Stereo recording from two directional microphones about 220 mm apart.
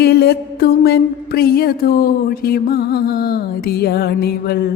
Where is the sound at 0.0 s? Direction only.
45° left (ahead or behind).